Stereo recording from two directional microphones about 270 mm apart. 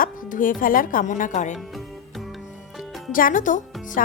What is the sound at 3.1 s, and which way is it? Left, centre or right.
Speech, left.